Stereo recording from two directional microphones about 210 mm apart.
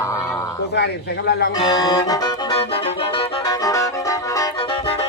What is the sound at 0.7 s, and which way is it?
Speech, 50° left (ahead or behind).